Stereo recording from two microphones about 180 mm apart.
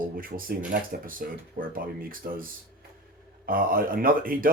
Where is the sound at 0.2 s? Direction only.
50° right (ahead or behind).